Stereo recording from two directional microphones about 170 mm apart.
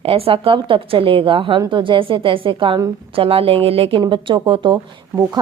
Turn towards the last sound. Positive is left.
turn(degrees=-25)  # may be behind; listen again after turning